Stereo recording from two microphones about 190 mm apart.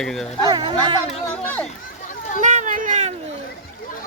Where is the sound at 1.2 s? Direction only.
10° left (ahead or behind).